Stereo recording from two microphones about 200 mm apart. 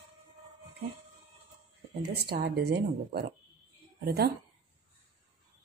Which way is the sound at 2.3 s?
55° right (ahead or behind).